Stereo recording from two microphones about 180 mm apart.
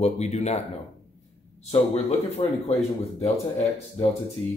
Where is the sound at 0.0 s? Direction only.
35° left (ahead or behind).